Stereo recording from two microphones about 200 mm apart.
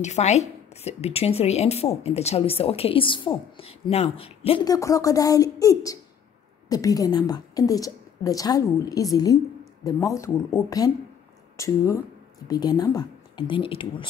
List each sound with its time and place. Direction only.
0.0 s a woman's voice: 35° left (ahead or behind)